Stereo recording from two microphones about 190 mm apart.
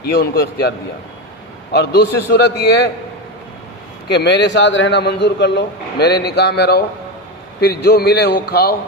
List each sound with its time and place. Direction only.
0.0 s a man's voice: 55° left (ahead or behind)
1.7 s a man's voice: 60° left (ahead or behind)
4.1 s a man's voice: 65° left (ahead or behind)